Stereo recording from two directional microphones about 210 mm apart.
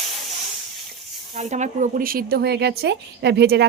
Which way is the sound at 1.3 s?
35° right (ahead or behind).